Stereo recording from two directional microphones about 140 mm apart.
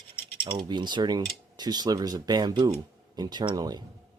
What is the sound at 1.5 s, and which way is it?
Speech, 30° right (ahead or behind).